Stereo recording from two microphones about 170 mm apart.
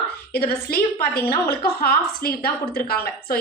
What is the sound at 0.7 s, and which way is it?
A woman's voice, 60° left (ahead or behind).